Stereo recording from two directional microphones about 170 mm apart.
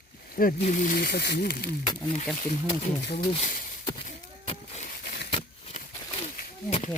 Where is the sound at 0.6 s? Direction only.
45° left (ahead or behind).